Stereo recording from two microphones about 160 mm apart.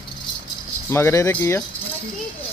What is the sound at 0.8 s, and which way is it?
Speech, 15° left (ahead or behind).